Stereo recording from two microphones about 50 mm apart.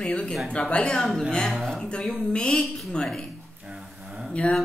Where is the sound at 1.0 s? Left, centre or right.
Centre.